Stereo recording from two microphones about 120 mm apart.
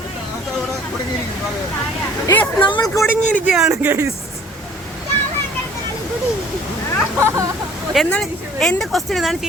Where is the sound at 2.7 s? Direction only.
30° left (ahead or behind).